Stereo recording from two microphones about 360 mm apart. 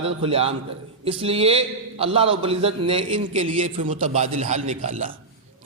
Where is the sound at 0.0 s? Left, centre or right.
Centre.